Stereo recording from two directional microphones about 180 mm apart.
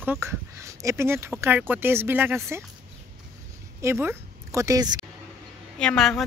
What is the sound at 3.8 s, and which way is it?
A woman's voice, 15° right (ahead or behind).